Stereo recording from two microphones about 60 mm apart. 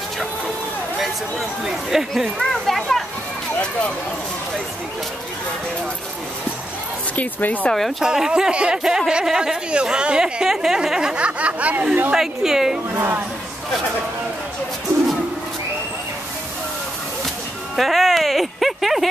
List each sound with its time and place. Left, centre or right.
1.7 s speech: centre
2.3 s a child's voice: centre
7.2 s speech: left
8.0 s speech: centre; by 12.1 s right
12.1 s speech: centre
12.9 s a woman's voice: right
17.7 s speech: centre